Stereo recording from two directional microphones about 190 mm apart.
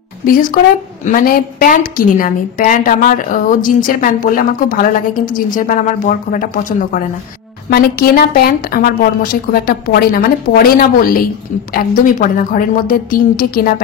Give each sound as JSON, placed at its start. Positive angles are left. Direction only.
{"t": 0.3, "sound": "a woman's voice", "side_deg": 45}